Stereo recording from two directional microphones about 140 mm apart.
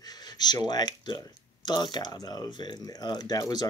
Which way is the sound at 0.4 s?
30° left (ahead or behind).